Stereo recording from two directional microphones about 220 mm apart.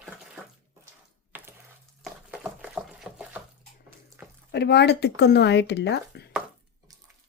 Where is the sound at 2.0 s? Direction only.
5° right (ahead or behind).